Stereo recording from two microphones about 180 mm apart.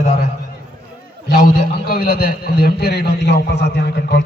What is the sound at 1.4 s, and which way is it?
A man's voice, 55° left (ahead or behind).